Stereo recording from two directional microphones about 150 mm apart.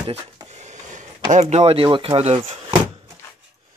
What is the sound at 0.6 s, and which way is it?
Speech, 55° right (ahead or behind).